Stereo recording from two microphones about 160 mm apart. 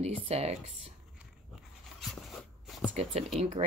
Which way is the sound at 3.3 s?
45° right (ahead or behind).